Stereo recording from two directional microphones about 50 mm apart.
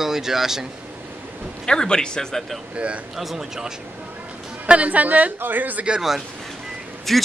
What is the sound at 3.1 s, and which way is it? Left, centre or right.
Speech, centre.